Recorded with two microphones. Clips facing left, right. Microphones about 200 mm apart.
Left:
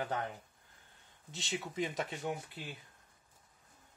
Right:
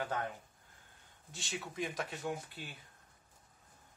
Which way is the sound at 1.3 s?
20° left (ahead or behind).